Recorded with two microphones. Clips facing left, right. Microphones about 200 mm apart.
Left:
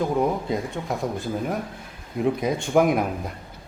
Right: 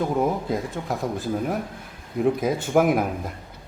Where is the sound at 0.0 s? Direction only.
Centre (ahead or behind).